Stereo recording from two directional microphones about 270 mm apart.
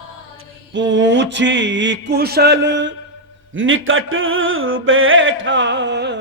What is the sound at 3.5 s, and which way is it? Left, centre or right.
Music, right.